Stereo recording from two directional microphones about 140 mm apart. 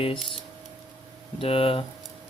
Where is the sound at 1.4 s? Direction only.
40° left (ahead or behind).